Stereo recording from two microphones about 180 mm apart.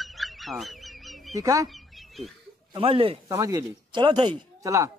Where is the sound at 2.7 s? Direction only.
30° right (ahead or behind).